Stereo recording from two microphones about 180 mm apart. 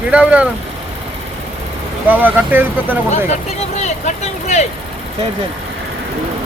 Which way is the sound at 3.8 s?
40° left (ahead or behind).